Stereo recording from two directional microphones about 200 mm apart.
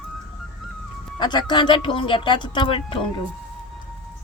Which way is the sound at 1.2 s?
20° left (ahead or behind).